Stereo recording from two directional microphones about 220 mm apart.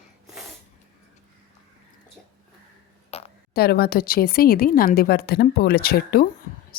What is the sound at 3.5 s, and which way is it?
Speech, 45° left (ahead or behind).